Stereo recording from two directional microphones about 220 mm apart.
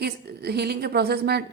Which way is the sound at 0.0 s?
50° right (ahead or behind).